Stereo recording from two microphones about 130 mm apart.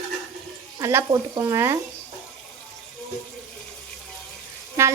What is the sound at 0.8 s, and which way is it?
Speech, 20° right (ahead or behind).